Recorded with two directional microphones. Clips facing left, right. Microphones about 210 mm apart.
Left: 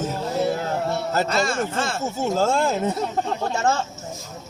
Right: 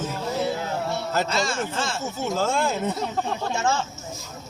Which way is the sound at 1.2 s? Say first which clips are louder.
Left 2 dB; 55° left (ahead or behind).